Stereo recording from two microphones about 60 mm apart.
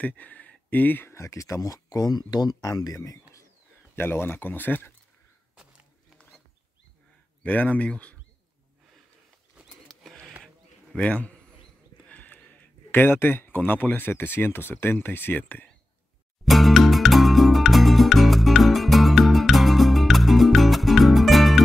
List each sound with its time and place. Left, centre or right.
0.0 s speech: left
1.1 s speech: left
3.9 s speech: left
7.4 s speech: left
10.4 s a sound: centre
11.1 s speech: left
12.1 s a sound: left
12.9 s speech: left
16.4 s music: centre